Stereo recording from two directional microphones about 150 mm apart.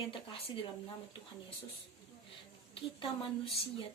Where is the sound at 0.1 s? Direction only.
35° left (ahead or behind).